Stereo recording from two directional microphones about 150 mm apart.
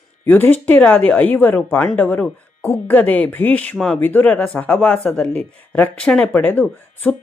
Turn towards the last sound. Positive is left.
turn(degrees=10)  # may be behind; listen again after turning